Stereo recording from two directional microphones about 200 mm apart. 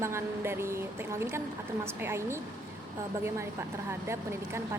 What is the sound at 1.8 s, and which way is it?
Speech, 10° right (ahead or behind).